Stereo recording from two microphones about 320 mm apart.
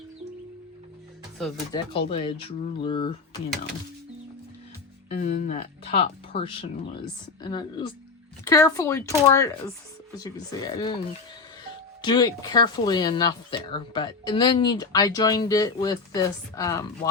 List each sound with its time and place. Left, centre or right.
1.7 s speech: centre
5.1 s speech: left